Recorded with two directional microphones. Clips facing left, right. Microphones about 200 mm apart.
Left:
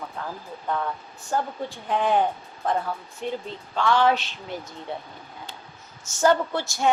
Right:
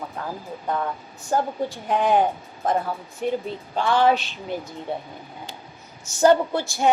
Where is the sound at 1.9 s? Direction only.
45° right (ahead or behind).